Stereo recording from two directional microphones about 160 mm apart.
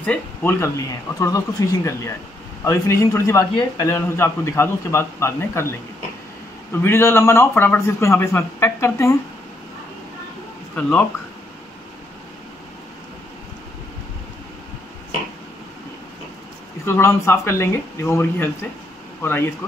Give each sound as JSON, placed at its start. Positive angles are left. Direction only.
{"t": 0.0, "sound": "a man's voice", "side_deg": 10}
{"t": 10.8, "sound": "a man's voice", "side_deg": 10}
{"t": 16.8, "sound": "a man's voice", "side_deg": 15}